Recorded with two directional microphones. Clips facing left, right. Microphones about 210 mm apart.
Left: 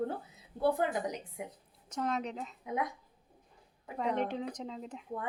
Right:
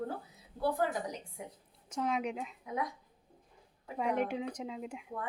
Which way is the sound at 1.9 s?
10° right (ahead or behind).